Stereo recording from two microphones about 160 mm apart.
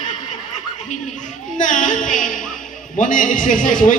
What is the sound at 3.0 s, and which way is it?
A man's voice, 55° left (ahead or behind).